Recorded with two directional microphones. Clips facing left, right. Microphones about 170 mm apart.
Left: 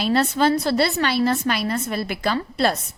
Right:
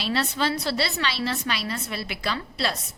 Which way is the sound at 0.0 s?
50° left (ahead or behind).